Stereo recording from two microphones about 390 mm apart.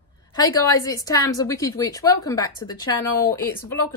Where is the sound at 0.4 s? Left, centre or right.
Centre.